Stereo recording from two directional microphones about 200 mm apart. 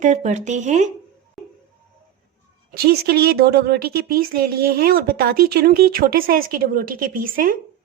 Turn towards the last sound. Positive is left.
turn(degrees=-45)  # may be behind; listen again after turning